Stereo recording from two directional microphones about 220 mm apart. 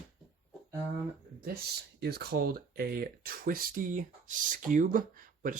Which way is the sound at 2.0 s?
45° right (ahead or behind).